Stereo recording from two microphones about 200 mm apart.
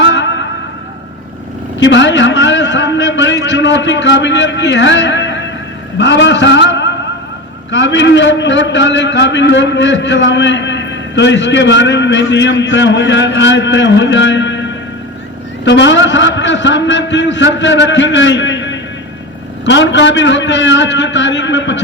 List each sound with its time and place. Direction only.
0.0 s music: 65° left (ahead or behind)
1.8 s a man's voice: 65° left (ahead or behind)